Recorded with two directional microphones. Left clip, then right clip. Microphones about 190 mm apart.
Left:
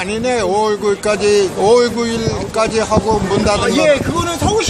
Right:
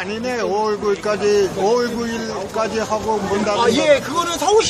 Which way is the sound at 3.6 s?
Centre (ahead or behind).